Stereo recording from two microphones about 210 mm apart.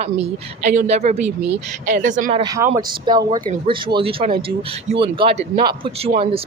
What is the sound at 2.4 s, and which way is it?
A man's voice, 15° right (ahead or behind).